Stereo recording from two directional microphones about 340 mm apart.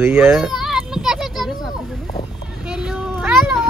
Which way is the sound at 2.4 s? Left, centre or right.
Centre.